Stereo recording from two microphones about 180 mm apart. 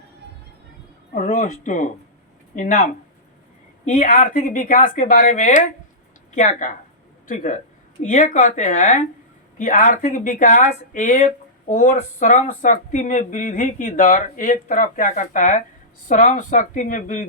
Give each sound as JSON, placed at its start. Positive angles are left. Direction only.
{"t": 1.1, "sound": "speech", "side_deg": 45}